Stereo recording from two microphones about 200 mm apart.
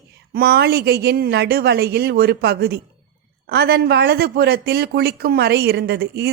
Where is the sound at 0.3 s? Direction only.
50° right (ahead or behind).